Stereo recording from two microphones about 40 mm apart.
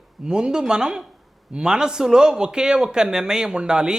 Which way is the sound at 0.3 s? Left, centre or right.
Right.